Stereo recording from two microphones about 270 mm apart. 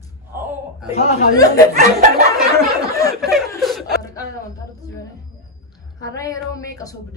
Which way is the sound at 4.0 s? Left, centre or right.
Centre.